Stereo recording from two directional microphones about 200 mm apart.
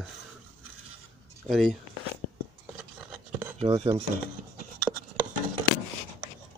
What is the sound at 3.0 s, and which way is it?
Filing, 10° right (ahead or behind).